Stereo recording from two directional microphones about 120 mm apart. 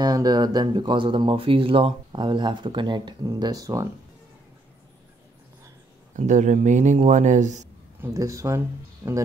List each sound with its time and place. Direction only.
0.0 s speech: 30° right (ahead or behind)
6.1 s speech: 90° right
8.0 s speech: 25° right (ahead or behind)